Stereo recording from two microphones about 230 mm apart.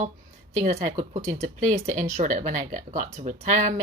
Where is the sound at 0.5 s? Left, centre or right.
Right.